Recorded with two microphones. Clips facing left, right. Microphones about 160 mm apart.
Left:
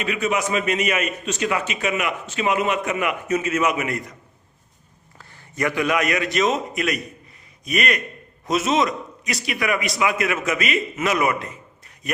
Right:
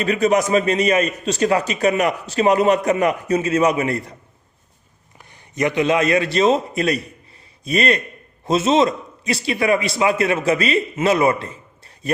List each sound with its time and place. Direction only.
0.0 s a man's voice: 35° right (ahead or behind)
5.1 s a man's voice: 20° right (ahead or behind)